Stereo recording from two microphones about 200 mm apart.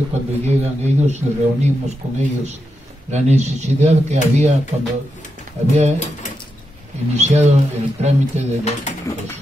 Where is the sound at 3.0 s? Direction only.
35° right (ahead or behind).